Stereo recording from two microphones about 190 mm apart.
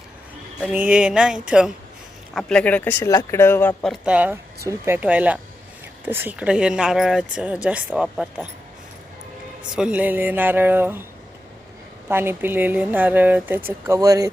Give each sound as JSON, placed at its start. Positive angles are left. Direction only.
{"t": 0.6, "sound": "speech", "side_deg": -10}
{"t": 4.0, "sound": "speech", "side_deg": -5}
{"t": 9.7, "sound": "speech", "side_deg": -5}
{"t": 12.0, "sound": "speech", "side_deg": -10}